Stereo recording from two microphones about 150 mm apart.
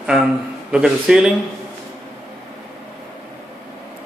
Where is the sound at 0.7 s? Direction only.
5° right (ahead or behind).